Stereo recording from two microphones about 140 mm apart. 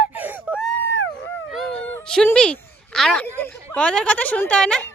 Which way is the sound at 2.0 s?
5° left (ahead or behind).